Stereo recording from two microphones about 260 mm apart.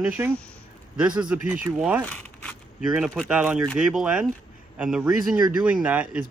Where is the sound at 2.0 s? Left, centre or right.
Centre.